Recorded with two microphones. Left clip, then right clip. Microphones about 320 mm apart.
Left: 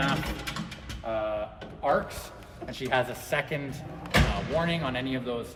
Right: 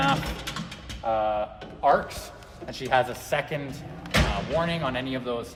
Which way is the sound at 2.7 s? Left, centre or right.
Centre.